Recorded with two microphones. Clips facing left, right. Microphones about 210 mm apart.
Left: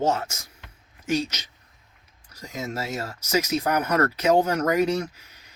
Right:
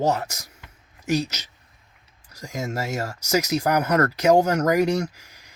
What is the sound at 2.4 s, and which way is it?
Speech, 45° right (ahead or behind).